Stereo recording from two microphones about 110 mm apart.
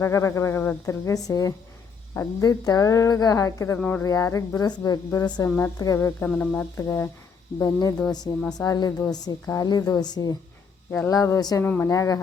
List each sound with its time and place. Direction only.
0.0 s speech: 25° left (ahead or behind)
3.8 s speech: 15° left (ahead or behind)
4.0 s speech: 30° left (ahead or behind)
6.2 s speech: 15° left (ahead or behind)
6.5 s speech: 25° left (ahead or behind)
11.6 s speech: 20° left (ahead or behind)
11.9 s speech: 30° left (ahead or behind)